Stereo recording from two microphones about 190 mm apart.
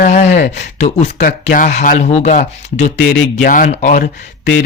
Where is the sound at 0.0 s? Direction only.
35° left (ahead or behind).